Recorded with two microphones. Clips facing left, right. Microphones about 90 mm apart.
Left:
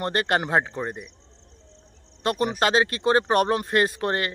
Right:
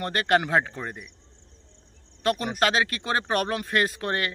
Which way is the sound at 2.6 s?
30° left (ahead or behind).